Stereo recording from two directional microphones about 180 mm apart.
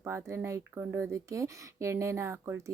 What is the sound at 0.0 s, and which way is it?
Speech, 15° right (ahead or behind).